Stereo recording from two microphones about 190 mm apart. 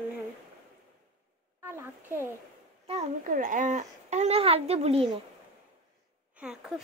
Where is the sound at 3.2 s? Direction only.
45° right (ahead or behind).